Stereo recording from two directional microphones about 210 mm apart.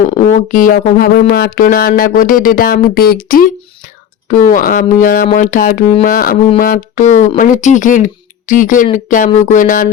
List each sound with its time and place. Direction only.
0.1 s speech: 30° left (ahead or behind)